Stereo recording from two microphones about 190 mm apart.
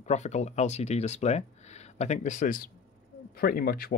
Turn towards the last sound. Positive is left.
turn(degrees=50)  # may be behind; listen again after turning